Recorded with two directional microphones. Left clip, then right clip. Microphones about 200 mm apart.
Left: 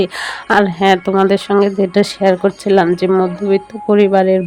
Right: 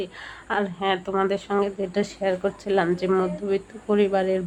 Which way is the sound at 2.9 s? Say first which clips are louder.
Left 9 dB; 25° left (ahead or behind).